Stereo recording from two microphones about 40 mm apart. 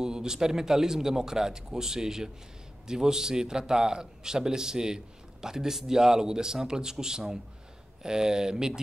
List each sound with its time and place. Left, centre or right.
0.0 s a man's voice: centre